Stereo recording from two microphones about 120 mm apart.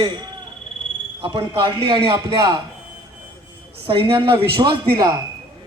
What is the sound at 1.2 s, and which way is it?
A man's voice, 45° right (ahead or behind).